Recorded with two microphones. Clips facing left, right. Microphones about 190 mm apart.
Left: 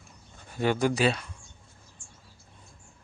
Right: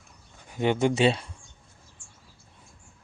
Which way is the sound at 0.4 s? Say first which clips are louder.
Right 2 dB; 15° right (ahead or behind).